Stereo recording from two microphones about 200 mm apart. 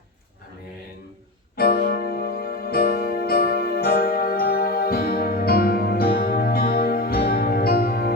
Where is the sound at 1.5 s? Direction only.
45° left (ahead or behind).